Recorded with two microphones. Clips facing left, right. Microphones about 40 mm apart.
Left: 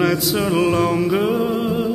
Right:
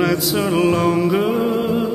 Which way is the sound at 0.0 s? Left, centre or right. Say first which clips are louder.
Even; centre.